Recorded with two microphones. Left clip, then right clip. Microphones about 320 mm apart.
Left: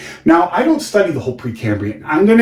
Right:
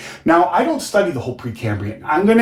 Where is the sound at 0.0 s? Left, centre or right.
Centre.